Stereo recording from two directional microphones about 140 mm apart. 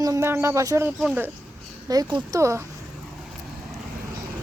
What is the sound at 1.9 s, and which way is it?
Speech, 30° right (ahead or behind).